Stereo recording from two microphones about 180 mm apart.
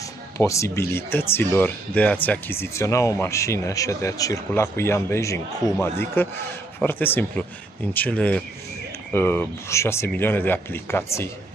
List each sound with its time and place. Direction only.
0.4 s speech: 15° left (ahead or behind)